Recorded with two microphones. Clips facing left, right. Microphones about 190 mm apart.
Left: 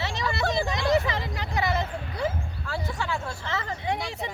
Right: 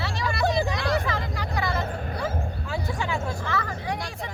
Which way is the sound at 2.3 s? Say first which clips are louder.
Right 3 dB; 45° right (ahead or behind).